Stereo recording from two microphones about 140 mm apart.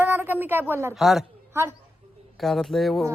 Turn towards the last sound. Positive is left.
turn(degrees=0)  # may be behind; listen again after turning